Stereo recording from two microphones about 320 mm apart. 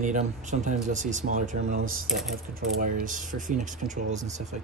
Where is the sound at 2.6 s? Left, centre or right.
Right.